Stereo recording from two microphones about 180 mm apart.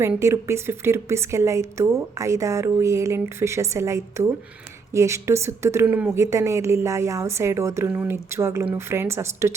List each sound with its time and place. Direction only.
0.0 s a woman's voice: 15° right (ahead or behind)